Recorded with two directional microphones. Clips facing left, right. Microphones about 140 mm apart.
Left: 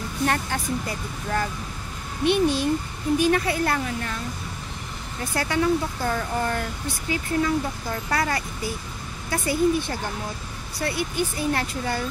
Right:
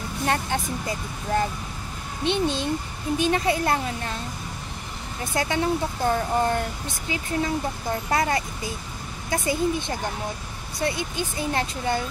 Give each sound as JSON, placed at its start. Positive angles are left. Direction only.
{"t": 0.2, "sound": "speech", "side_deg": -20}
{"t": 5.2, "sound": "speech", "side_deg": -20}